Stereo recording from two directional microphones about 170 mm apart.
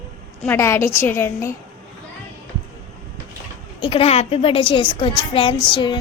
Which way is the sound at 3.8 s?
30° left (ahead or behind).